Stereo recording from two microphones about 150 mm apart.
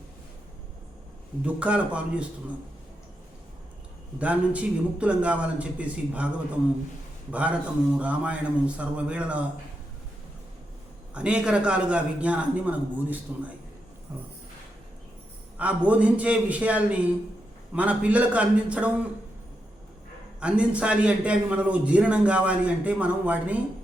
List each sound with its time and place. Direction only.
1.5 s a man's voice: 10° right (ahead or behind)
4.2 s a man's voice: 10° right (ahead or behind)
11.1 s a man's voice: 5° right (ahead or behind)
14.1 s a sound: 20° right (ahead or behind)
15.5 s a man's voice: 10° right (ahead or behind)
20.4 s a man's voice: 10° right (ahead or behind)